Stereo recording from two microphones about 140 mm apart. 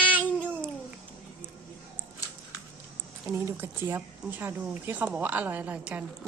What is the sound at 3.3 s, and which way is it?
A woman's voice, 20° right (ahead or behind).